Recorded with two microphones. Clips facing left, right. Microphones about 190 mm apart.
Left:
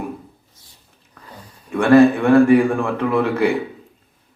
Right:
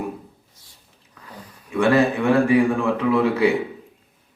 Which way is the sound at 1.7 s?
55° left (ahead or behind).